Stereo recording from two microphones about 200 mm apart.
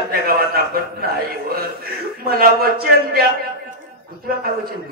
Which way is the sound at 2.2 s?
50° right (ahead or behind).